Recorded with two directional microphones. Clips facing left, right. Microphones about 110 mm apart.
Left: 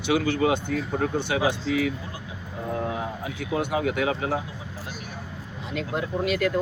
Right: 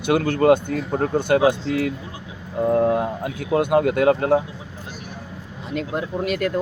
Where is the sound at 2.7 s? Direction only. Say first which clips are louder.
Right 10 dB; 50° right (ahead or behind).